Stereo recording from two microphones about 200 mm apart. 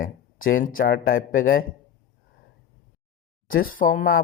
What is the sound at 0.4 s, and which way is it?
Speech, 45° left (ahead or behind).